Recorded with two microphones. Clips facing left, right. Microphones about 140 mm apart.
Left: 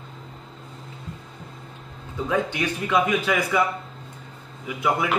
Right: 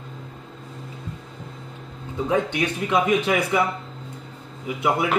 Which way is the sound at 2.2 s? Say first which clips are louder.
Right 2 dB; 25° right (ahead or behind).